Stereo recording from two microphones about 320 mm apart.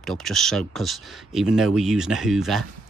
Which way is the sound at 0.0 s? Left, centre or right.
Centre.